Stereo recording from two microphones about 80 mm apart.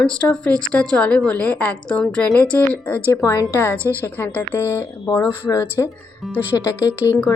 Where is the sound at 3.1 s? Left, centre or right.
Left.